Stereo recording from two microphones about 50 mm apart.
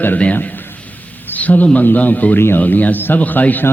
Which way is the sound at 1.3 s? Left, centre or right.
Left.